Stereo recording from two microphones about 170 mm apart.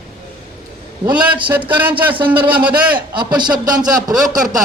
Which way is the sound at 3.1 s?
25° right (ahead or behind).